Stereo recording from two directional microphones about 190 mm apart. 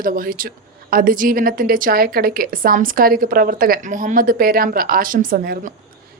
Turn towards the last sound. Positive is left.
turn(degrees=-50)  # may be behind; listen again after turning